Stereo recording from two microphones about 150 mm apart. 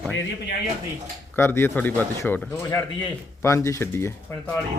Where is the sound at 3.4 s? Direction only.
20° left (ahead or behind).